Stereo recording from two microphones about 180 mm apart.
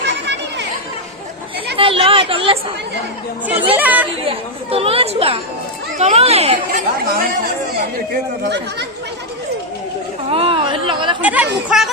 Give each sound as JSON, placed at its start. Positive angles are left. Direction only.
{"t": 0.0, "sound": "chatter", "side_deg": -75}
{"t": 1.7, "sound": "chatter", "side_deg": -30}
{"t": 3.8, "sound": "speech", "side_deg": -10}
{"t": 4.2, "sound": "speech", "side_deg": -30}
{"t": 6.7, "sound": "speech", "side_deg": -50}
{"t": 8.4, "sound": "speech", "side_deg": -70}
{"t": 10.2, "sound": "a sound", "side_deg": -30}
{"t": 11.2, "sound": "speech", "side_deg": -10}